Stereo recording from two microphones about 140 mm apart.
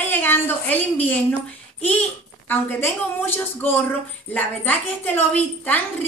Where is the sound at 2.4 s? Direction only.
15° left (ahead or behind).